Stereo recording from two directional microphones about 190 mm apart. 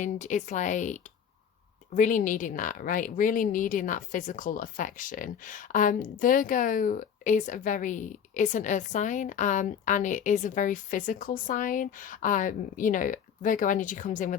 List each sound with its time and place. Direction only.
0.0 s a woman's voice: 40° left (ahead or behind)